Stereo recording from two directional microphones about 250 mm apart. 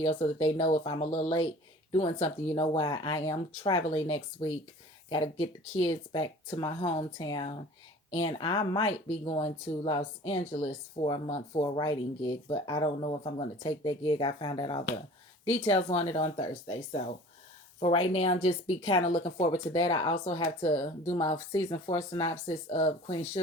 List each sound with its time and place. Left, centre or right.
0.0 s speech: left